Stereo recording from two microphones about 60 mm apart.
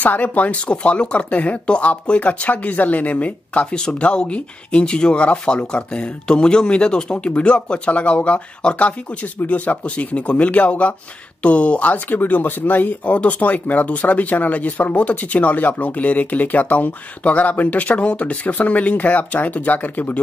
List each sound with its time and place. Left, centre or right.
0.0 s speech: left